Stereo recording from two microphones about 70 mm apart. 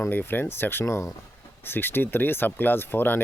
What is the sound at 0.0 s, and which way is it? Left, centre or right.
Speech, left.